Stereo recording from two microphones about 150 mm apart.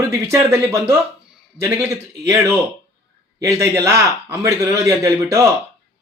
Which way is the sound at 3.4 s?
20° right (ahead or behind).